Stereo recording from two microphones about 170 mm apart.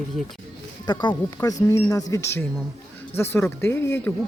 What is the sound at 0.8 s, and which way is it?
Speech, 25° left (ahead or behind).